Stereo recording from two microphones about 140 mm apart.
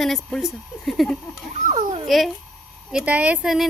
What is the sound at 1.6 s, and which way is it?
Speech, 55° right (ahead or behind).